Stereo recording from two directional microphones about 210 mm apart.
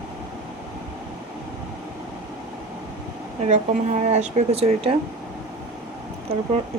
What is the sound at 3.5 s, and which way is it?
Speech, 35° right (ahead or behind).